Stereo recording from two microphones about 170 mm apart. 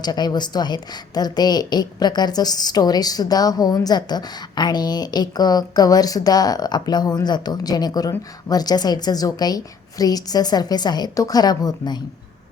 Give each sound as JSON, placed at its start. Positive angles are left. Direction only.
{"t": 0.0, "sound": "a woman's voice", "side_deg": 25}